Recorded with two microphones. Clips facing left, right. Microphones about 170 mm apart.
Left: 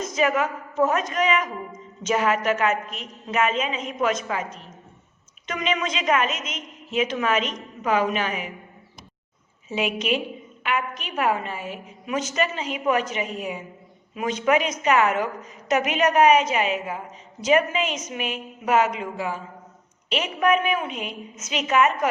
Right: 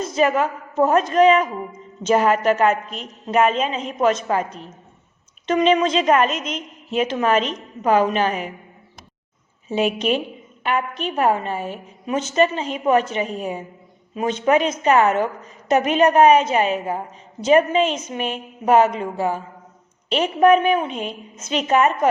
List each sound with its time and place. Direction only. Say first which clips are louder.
0.0 s a woman's voice: right 4 dB; 30° right (ahead or behind)
9.6 s a woman's voice: right 5 dB; 35° right (ahead or behind)